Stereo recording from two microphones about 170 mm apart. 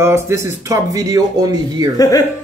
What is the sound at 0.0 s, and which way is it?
A man's voice, 15° right (ahead or behind).